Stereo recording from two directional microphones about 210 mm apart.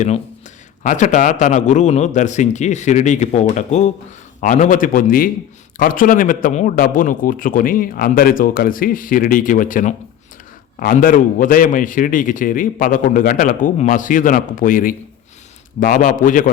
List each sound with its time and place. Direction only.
0.8 s a man's voice: 35° left (ahead or behind)